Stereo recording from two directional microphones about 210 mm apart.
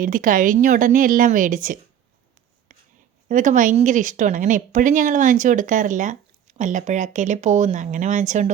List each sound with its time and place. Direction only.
0.0 s speech: 40° right (ahead or behind)
2.7 s writing: 35° right (ahead or behind)
3.2 s speech: 35° right (ahead or behind)